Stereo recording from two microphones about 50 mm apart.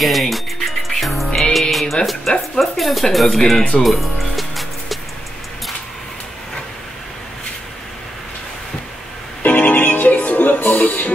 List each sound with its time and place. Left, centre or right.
0.0 s music: centre
2.3 s speech: centre
3.8 s music: centre
9.4 s music: left